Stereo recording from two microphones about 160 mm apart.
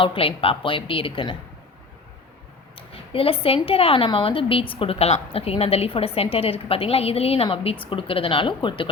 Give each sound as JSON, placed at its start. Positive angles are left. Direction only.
{"t": 0.0, "sound": "a woman's voice", "side_deg": 35}
{"t": 2.7, "sound": "a woman's voice", "side_deg": 35}